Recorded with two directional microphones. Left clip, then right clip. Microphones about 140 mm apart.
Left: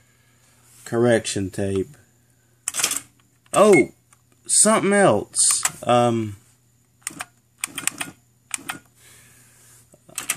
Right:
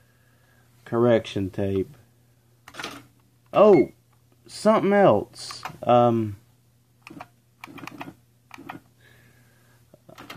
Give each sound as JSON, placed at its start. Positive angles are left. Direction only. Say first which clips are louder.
{"t": 0.8, "sound": "speech", "louder": "left 2 dB", "side_deg": 25}
{"t": 3.4, "sound": "speech", "louder": "left 1 dB", "side_deg": 25}
{"t": 9.8, "sound": "a sound", "louder": "left 12 dB", "side_deg": 10}